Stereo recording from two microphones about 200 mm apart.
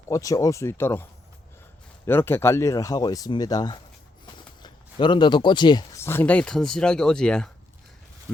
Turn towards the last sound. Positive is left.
turn(degrees=5)  # may be behind; listen again after turning